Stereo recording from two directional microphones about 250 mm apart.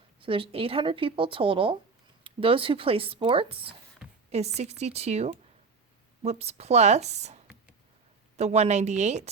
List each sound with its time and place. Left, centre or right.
0.2 s speech: right